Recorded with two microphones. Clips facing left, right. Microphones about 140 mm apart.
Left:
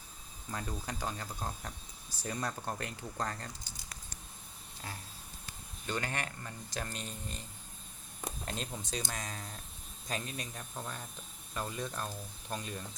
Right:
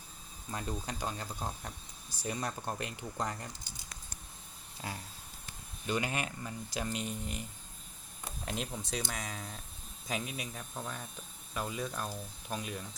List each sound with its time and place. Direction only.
0.5 s speech: 20° right (ahead or behind)
5.8 s speech: 15° right (ahead or behind)
8.4 s speech: 5° right (ahead or behind)